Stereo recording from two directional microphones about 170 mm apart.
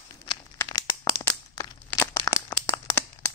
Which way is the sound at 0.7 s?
25° left (ahead or behind).